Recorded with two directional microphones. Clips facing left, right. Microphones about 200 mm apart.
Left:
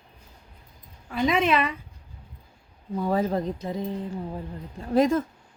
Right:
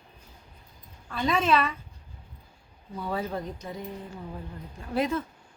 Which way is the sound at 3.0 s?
40° left (ahead or behind).